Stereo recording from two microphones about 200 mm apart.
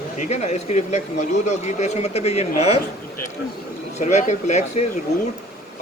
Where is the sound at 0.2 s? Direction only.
35° left (ahead or behind).